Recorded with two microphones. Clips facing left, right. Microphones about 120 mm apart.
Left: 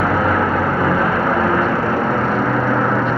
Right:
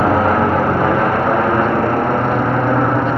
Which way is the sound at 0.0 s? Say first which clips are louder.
Right 3 dB; 30° right (ahead or behind).